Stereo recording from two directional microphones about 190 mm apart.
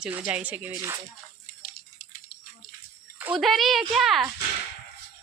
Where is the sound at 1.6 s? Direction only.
45° left (ahead or behind).